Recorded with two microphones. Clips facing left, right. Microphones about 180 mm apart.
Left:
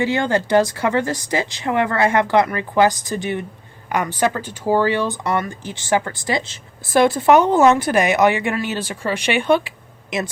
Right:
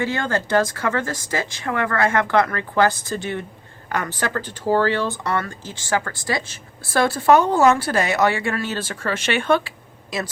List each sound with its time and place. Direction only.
0.0 s speech: 15° left (ahead or behind)